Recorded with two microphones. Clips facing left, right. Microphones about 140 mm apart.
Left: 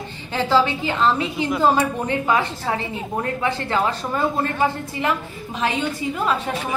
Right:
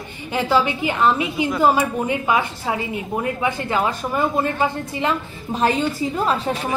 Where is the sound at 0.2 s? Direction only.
15° right (ahead or behind).